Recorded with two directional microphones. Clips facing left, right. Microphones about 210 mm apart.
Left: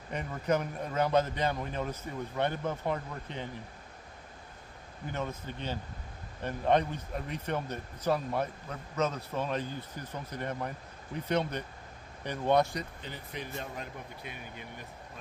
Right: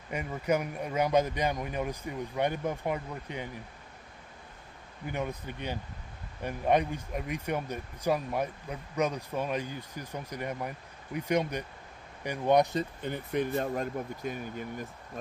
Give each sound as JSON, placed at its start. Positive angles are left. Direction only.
{"t": 0.1, "sound": "speech", "side_deg": -10}
{"t": 5.0, "sound": "speech", "side_deg": -10}
{"t": 13.0, "sound": "speech", "side_deg": -55}
{"t": 13.5, "sound": "speech", "side_deg": -45}